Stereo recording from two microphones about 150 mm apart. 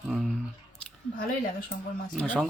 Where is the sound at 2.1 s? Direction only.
5° left (ahead or behind).